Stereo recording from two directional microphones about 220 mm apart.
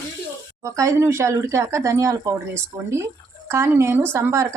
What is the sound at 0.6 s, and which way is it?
Speech, 15° right (ahead or behind).